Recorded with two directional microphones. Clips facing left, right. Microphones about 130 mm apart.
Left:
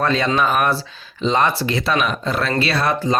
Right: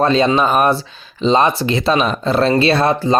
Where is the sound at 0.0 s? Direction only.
20° right (ahead or behind).